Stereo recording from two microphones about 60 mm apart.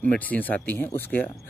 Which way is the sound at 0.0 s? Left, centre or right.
Left.